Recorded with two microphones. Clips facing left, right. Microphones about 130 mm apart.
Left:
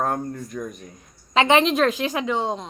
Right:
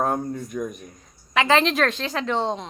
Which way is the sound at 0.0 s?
5° right (ahead or behind).